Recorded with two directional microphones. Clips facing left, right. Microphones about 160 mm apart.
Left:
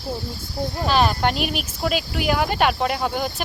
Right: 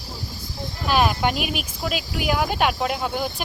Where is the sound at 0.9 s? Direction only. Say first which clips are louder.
Even; 5° right (ahead or behind).